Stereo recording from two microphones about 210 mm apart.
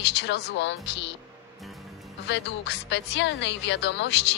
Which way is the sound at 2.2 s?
55° left (ahead or behind).